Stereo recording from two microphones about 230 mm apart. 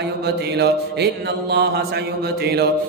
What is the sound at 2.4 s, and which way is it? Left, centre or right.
Mantra, right.